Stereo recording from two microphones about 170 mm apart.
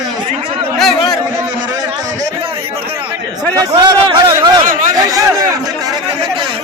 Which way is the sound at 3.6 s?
25° right (ahead or behind).